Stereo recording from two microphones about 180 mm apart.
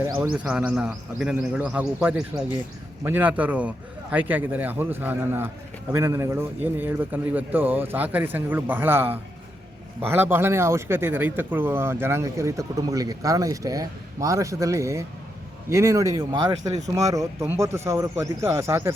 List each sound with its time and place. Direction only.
0.4 s a man's voice: 5° right (ahead or behind)